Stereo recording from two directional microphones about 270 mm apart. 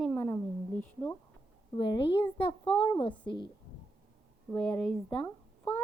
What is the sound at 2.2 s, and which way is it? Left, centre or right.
A child's voice, centre.